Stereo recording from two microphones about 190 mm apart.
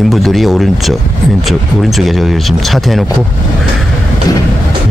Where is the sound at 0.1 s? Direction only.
Centre (ahead or behind).